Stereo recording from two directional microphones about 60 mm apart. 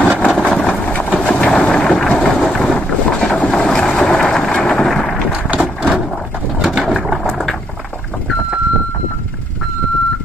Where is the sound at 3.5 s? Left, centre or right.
Centre.